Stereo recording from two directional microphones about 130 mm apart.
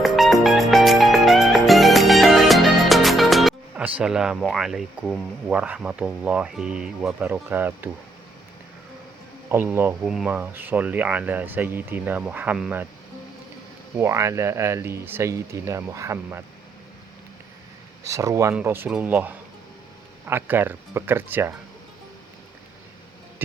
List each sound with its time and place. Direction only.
0.0 s music: centre (ahead or behind)
3.8 s speech: 10° right (ahead or behind)
9.5 s speech: 15° right (ahead or behind)
10.1 s speech: 5° right (ahead or behind)
14.0 s speech: 20° right (ahead or behind)
18.0 s speech: 25° right (ahead or behind)